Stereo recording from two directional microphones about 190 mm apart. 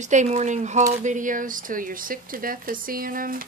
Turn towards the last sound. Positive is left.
turn(degrees=-45)  # may be behind; listen again after turning